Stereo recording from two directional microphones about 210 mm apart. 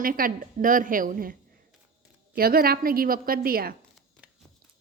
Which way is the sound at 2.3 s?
45° right (ahead or behind).